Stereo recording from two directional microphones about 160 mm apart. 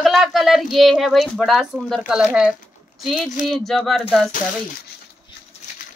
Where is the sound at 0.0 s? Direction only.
Centre (ahead or behind).